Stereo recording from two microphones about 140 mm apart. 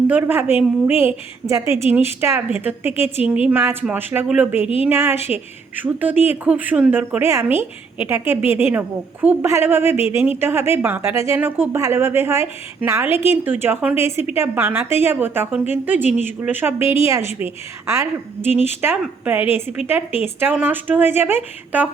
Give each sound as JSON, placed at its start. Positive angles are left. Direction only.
{"t": 0.1, "sound": "a woman's voice", "side_deg": -15}
{"t": 19.0, "sound": "a woman's voice", "side_deg": -10}